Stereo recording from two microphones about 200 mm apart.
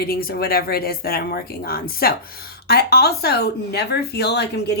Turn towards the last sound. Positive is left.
turn(degrees=55)  # may be behind; listen again after turning